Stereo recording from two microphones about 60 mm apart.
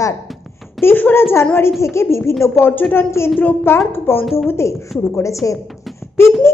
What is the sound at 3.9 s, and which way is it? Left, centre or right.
Speech, left.